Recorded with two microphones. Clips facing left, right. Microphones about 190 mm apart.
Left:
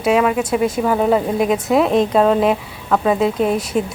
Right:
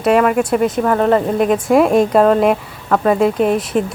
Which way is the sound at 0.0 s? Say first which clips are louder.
Right 3 dB; centre (ahead or behind).